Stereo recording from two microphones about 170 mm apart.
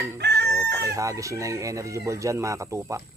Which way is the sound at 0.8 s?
20° right (ahead or behind).